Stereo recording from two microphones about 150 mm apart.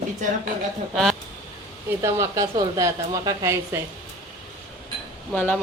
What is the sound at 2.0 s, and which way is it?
A woman's voice, 20° right (ahead or behind).